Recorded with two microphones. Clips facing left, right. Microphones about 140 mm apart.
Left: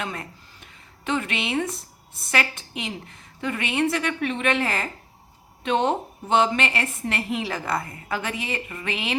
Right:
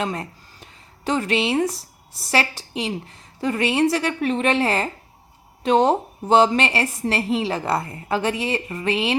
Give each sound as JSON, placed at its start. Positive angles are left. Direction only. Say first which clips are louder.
{"t": 0.0, "sound": "a woman's voice", "louder": "right 6 dB", "side_deg": -35}